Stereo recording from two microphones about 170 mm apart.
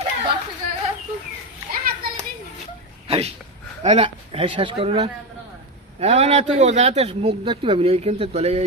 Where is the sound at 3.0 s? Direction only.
35° right (ahead or behind).